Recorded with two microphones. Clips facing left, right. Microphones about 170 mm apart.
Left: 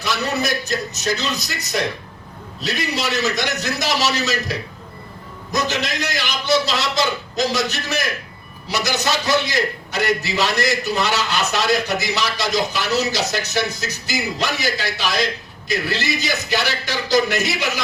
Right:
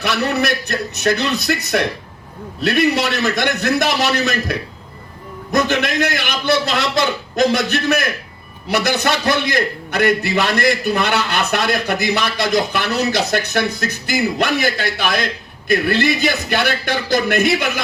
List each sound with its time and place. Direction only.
0.0 s a man's voice: 60° right (ahead or behind)